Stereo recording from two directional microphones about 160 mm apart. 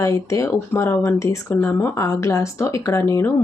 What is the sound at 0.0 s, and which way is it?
Speech, 20° left (ahead or behind).